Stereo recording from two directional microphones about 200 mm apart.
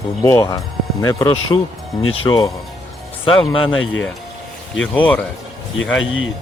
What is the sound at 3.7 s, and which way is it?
Speech, 80° left.